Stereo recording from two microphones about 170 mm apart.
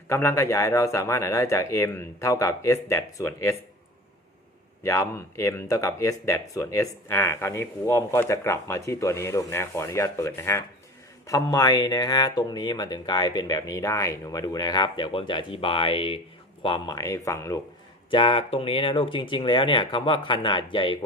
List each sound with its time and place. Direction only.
0.1 s speech: 15° left (ahead or behind)
4.8 s speech: 15° left (ahead or behind)
18.1 s speech: 30° left (ahead or behind)